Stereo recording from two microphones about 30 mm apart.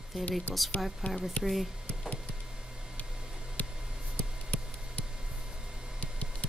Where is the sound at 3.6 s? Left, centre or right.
Left.